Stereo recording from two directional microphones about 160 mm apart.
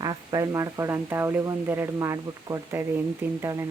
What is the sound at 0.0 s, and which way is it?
A woman's voice, 25° right (ahead or behind).